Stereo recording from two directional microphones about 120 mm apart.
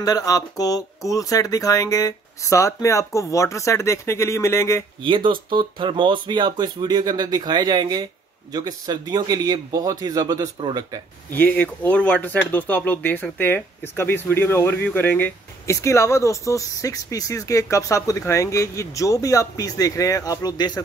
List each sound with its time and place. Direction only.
0.0 s speech: 30° left (ahead or behind)
5.0 s speech: 45° right (ahead or behind)
11.3 s speech: 15° left (ahead or behind); by 20.8 s 35° left (ahead or behind)